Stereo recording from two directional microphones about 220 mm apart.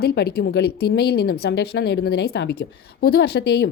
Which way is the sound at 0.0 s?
45° left (ahead or behind).